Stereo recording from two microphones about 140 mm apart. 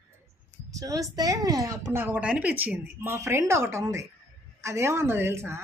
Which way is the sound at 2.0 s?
10° right (ahead or behind).